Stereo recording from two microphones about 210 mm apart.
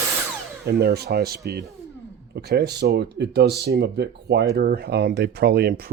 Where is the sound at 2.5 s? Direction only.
50° right (ahead or behind).